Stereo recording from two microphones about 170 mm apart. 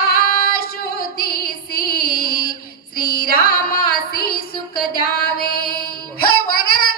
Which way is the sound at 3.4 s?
60° left (ahead or behind).